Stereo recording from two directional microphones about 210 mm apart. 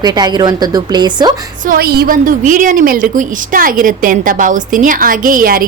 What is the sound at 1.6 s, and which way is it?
A woman's voice, 45° right (ahead or behind).